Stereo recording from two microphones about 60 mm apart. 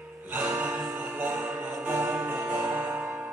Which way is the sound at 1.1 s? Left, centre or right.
Right.